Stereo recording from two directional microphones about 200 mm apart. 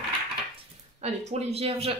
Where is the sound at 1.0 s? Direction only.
35° right (ahead or behind).